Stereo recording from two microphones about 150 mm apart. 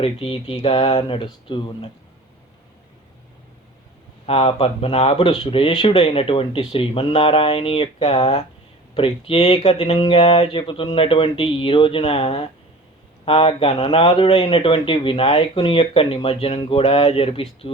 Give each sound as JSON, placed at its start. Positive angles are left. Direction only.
{"t": 0.0, "sound": "a man's voice", "side_deg": 40}
{"t": 4.3, "sound": "a man's voice", "side_deg": 40}